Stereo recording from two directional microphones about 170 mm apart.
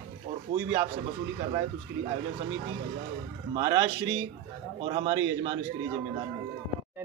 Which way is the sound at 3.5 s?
25° right (ahead or behind).